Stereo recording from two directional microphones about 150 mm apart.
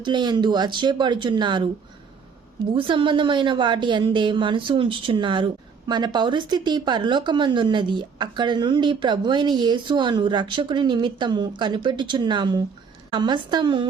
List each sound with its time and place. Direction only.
0.0 s speech: 30° right (ahead or behind)
2.7 s speech: 35° right (ahead or behind)